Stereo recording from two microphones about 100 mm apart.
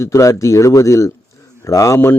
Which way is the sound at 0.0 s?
30° left (ahead or behind).